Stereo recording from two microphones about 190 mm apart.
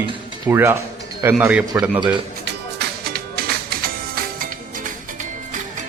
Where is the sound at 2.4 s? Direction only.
55° right (ahead or behind).